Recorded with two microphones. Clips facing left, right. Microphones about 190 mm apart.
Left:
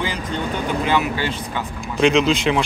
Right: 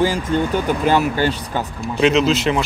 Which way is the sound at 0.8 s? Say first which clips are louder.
Right 5 dB; 40° right (ahead or behind).